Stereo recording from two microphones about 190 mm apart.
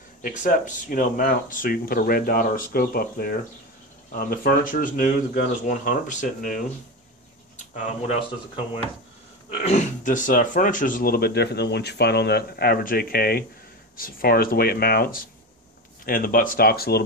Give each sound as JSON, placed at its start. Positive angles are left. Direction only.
{"t": 0.2, "sound": "speech", "side_deg": 45}
{"t": 9.5, "sound": "speech", "side_deg": 40}